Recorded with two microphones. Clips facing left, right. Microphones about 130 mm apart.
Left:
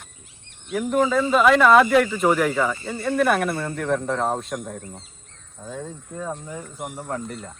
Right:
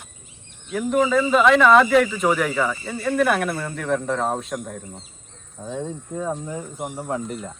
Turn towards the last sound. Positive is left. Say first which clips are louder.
# right 3 dB
turn(degrees=0)  # may be behind; listen again after turning